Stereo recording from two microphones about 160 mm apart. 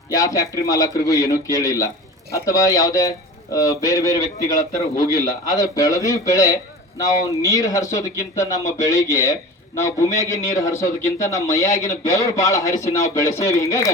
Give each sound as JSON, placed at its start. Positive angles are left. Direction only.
{"t": 0.1, "sound": "speech", "side_deg": 20}